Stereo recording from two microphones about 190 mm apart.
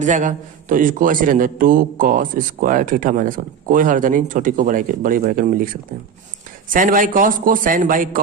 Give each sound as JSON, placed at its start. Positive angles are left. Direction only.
{"t": 0.0, "sound": "a man's voice", "side_deg": -40}